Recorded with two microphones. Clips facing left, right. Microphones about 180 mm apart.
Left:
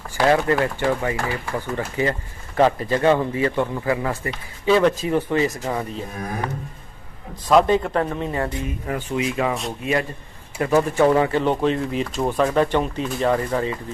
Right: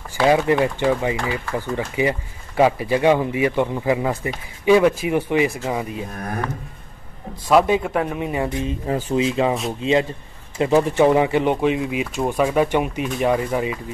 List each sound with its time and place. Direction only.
0.2 s a man's voice: 15° right (ahead or behind)
7.4 s a man's voice: 10° right (ahead or behind)
8.5 s a man's voice: 25° right (ahead or behind)